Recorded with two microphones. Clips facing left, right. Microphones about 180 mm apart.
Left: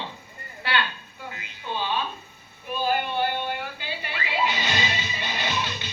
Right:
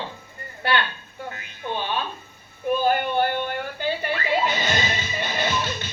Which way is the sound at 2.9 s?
50° right (ahead or behind).